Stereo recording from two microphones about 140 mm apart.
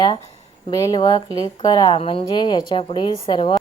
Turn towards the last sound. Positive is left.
turn(degrees=35)  # may be behind; listen again after turning